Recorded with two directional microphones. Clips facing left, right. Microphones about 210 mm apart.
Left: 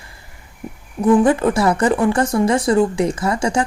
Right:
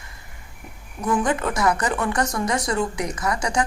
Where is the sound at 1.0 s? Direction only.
30° left (ahead or behind).